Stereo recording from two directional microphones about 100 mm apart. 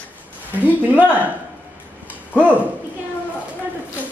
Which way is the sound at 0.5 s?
15° right (ahead or behind).